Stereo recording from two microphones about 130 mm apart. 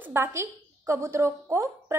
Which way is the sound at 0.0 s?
20° right (ahead or behind).